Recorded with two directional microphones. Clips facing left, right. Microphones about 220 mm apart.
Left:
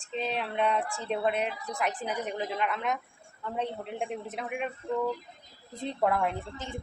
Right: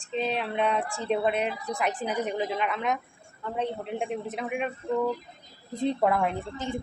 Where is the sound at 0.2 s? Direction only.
Centre (ahead or behind).